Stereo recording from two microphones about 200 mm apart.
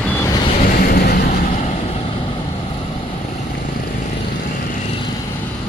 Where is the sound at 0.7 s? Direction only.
50° left (ahead or behind).